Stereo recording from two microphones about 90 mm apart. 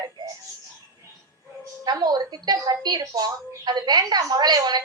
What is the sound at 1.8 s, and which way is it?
A woman's voice, 50° right (ahead or behind).